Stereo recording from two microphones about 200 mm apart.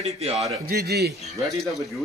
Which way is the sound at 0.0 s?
30° right (ahead or behind).